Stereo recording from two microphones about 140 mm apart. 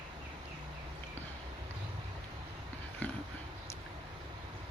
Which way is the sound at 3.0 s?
10° left (ahead or behind).